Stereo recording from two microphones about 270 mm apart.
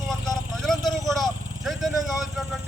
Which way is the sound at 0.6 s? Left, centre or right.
Centre.